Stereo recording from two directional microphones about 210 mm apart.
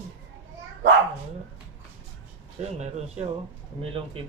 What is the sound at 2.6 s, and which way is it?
Speech, 30° right (ahead or behind).